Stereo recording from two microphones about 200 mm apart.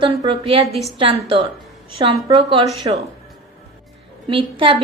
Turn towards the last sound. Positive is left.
turn(degrees=-25)  # may be behind; listen again after turning